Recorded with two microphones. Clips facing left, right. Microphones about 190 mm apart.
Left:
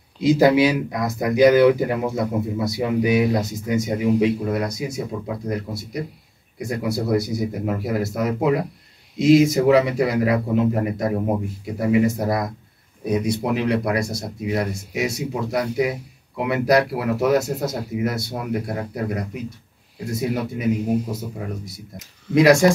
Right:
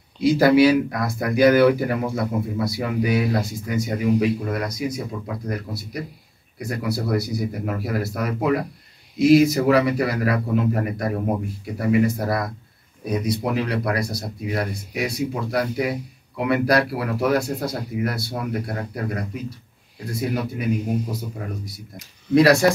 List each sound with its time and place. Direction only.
0.2 s speech: 20° left (ahead or behind)
21.9 s speech: 15° left (ahead or behind)